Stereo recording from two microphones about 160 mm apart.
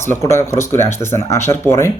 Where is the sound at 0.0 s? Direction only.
15° left (ahead or behind).